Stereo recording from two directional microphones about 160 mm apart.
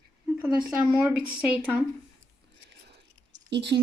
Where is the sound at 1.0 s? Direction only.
10° right (ahead or behind).